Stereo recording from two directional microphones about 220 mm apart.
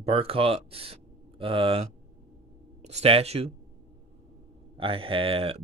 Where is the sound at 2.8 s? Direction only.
30° right (ahead or behind).